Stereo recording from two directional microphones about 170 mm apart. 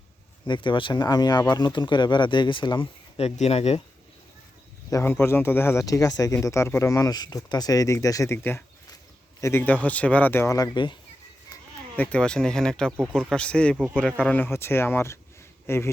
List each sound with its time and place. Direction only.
0.4 s speech: 30° left (ahead or behind)
4.9 s speech: 15° left (ahead or behind)
11.9 s speech: 5° left (ahead or behind)